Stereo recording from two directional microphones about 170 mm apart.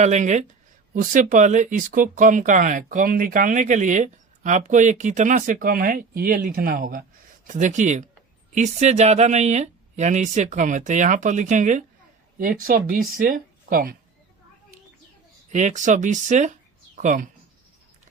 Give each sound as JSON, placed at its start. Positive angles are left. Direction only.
{"t": 0.0, "sound": "speech", "side_deg": -45}
{"t": 15.5, "sound": "speech", "side_deg": -45}